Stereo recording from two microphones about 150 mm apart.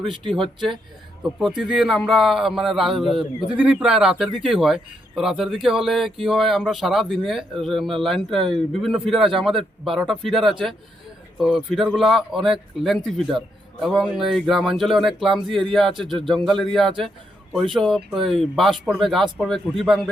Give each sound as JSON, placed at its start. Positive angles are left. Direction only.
{"t": 0.1, "sound": "speech", "side_deg": -35}
{"t": 1.4, "sound": "speech", "side_deg": 0}